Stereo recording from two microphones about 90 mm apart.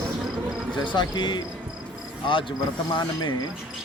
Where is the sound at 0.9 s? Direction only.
60° left (ahead or behind).